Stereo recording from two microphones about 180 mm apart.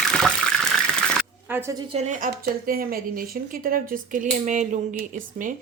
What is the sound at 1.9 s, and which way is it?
Speech, 40° right (ahead or behind).